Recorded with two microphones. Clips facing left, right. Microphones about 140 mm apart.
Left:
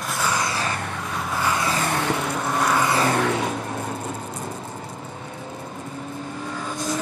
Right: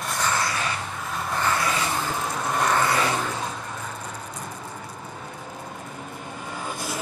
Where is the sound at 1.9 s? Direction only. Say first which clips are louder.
Left 4 dB; 70° left (ahead or behind).